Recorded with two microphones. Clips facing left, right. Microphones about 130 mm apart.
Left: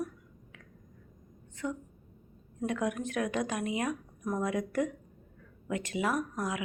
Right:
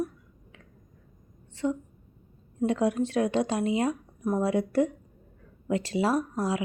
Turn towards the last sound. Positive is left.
turn(degrees=-30)  # may be behind; listen again after turning